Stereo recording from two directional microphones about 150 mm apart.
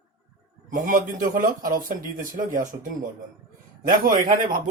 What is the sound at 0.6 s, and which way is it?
Speech, 60° right (ahead or behind).